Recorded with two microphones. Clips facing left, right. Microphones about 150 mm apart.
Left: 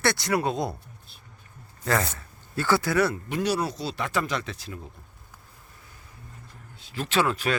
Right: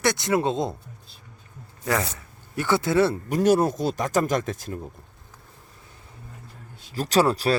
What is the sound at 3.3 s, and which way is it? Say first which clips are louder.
Speech: right 7 dB; 45° right (ahead or behind).